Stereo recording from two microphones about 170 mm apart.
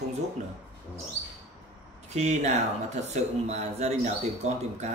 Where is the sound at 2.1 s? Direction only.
45° right (ahead or behind).